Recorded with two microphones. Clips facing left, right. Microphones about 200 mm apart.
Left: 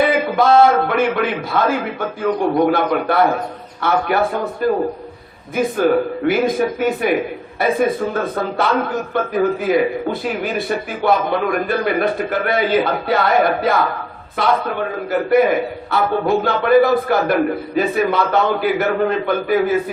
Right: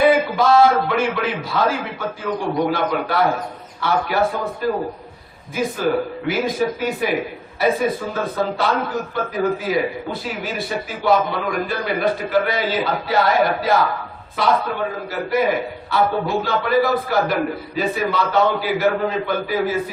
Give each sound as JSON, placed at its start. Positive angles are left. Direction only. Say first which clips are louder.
{"t": 0.3, "sound": "a man's voice", "louder": "left 2 dB", "side_deg": 55}